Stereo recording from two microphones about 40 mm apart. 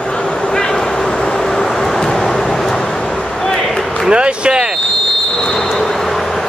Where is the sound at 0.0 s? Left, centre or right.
Left.